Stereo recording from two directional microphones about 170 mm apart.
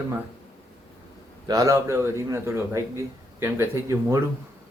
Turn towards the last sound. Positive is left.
turn(degrees=-15)  # may be behind; listen again after turning